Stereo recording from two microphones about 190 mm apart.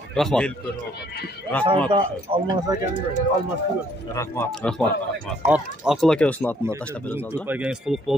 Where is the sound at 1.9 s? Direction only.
25° right (ahead or behind).